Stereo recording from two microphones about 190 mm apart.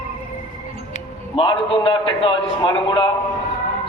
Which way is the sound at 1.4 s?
25° left (ahead or behind).